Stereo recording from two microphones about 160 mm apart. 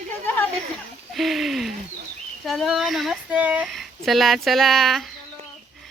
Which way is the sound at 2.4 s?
Centre (ahead or behind).